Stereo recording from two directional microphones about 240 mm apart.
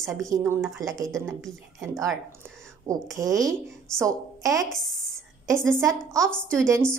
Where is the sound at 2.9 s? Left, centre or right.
Centre.